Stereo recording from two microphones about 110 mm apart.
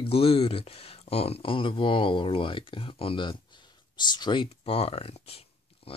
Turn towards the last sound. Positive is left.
turn(degrees=65)  # may be behind; listen again after turning